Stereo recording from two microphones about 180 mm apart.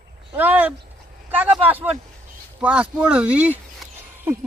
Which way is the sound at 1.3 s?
10° right (ahead or behind).